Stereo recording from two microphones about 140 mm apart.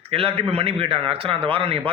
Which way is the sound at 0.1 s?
40° right (ahead or behind).